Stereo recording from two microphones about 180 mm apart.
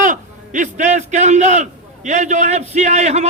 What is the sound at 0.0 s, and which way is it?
A man's voice, 45° right (ahead or behind).